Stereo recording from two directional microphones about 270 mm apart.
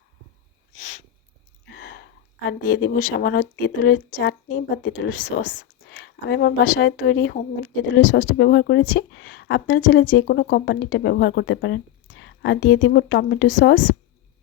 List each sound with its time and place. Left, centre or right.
1.6 s a sound: left
2.5 s speech: left
6.2 s speech: left